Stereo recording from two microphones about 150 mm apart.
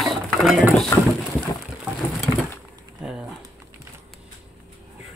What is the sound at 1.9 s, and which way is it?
Sewing machine, centre (ahead or behind).